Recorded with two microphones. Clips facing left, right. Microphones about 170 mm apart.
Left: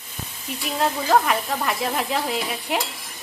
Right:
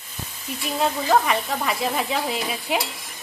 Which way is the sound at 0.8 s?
Centre (ahead or behind).